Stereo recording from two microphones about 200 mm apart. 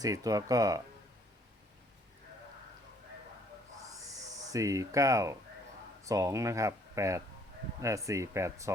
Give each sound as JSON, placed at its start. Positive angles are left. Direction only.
{"t": 0.0, "sound": "speech", "side_deg": -15}
{"t": 4.5, "sound": "speech", "side_deg": -15}